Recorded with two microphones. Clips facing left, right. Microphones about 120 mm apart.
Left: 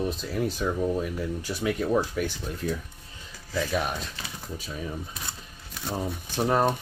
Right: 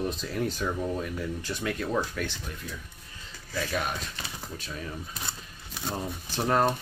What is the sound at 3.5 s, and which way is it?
Speech, 5° left (ahead or behind).